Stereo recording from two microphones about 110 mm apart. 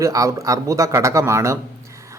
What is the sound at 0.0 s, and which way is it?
Speech, 30° right (ahead or behind).